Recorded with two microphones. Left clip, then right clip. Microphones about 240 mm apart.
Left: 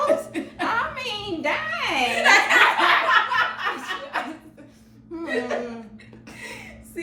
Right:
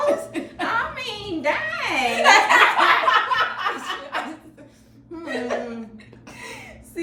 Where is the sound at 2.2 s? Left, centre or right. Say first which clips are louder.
Right 3 dB; centre.